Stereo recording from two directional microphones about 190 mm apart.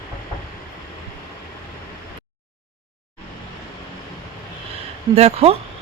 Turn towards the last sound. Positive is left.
turn(degrees=-35)  # may be behind; listen again after turning